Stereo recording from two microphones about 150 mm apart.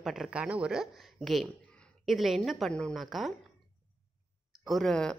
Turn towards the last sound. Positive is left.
turn(degrees=5)  # may be behind; listen again after turning